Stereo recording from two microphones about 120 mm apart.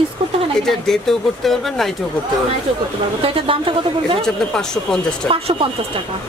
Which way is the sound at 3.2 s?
50° right (ahead or behind).